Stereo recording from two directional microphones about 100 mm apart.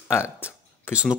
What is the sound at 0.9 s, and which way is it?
Speech, 10° right (ahead or behind).